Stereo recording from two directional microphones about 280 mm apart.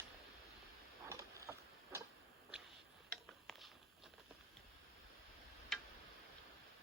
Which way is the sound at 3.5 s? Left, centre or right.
Centre.